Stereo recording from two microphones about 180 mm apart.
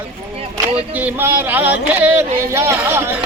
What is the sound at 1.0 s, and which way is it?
Speech, 10° right (ahead or behind).